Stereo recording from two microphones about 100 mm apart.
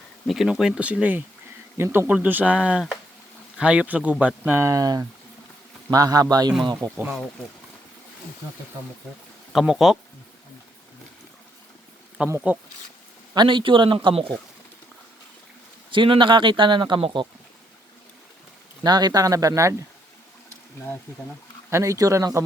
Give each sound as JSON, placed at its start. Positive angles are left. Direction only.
{"t": 0.3, "sound": "speech", "side_deg": 0}
{"t": 4.6, "sound": "speech", "side_deg": -35}
{"t": 9.5, "sound": "speech", "side_deg": -5}
{"t": 12.2, "sound": "speech", "side_deg": -15}
{"t": 13.3, "sound": "speech", "side_deg": -50}
{"t": 15.9, "sound": "speech", "side_deg": -55}
{"t": 18.8, "sound": "speech", "side_deg": -45}
{"t": 21.7, "sound": "speech", "side_deg": -30}